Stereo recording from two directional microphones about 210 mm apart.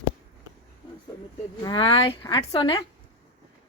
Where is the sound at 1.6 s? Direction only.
20° left (ahead or behind).